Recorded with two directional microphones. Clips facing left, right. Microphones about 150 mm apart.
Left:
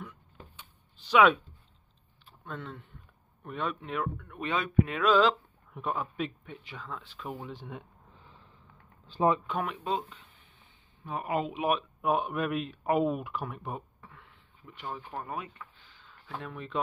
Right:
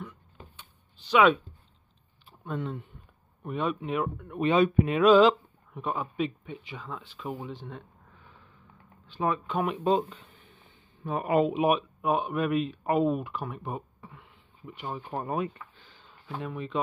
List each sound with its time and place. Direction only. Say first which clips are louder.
0.6 s a sound: even; 5° left (ahead or behind)
2.4 s speech: right 7 dB; 10° right (ahead or behind)
5.7 s speech: right 1 dB; centre (ahead or behind)
9.0 s a sound: left 3 dB; 35° left (ahead or behind)
9.8 s speech: right 7 dB; 40° right (ahead or behind)
11.1 s speech: right 7 dB; 55° right (ahead or behind)
12.0 s speech: right 2 dB; centre (ahead or behind)
14.0 s a sound: right 4 dB; 10° right (ahead or behind); by 16.1 s 35° right (ahead or behind)
16.3 s speech: right 5 dB; 5° right (ahead or behind)